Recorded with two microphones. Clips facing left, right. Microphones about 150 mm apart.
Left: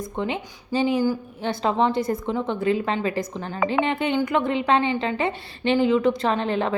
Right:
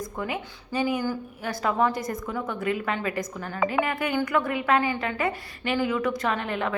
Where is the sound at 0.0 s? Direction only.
25° left (ahead or behind).